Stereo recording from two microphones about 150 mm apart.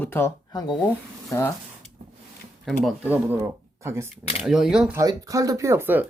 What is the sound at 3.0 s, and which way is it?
Speech, 10° right (ahead or behind).